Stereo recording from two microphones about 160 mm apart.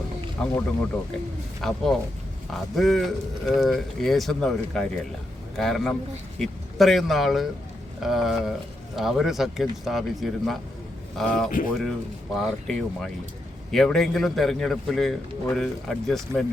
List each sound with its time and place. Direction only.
0.4 s speech: 5° left (ahead or behind)
1.6 s speech: centre (ahead or behind)